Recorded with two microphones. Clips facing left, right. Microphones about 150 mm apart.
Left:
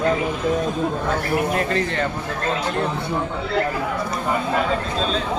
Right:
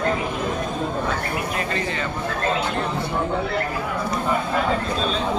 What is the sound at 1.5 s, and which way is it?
Speech, 55° left (ahead or behind).